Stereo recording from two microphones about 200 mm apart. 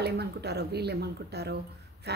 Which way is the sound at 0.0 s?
55° right (ahead or behind).